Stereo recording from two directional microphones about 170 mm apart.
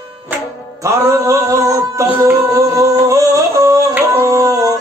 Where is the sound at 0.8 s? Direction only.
20° right (ahead or behind).